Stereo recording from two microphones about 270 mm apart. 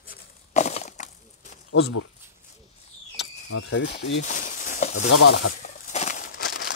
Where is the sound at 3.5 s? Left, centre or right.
Left.